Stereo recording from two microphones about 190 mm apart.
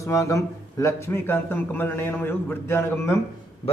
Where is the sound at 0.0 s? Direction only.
15° left (ahead or behind).